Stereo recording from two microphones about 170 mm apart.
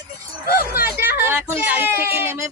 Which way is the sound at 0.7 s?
10° right (ahead or behind).